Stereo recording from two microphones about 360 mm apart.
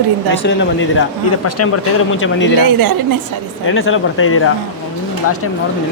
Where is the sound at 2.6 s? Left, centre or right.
Right.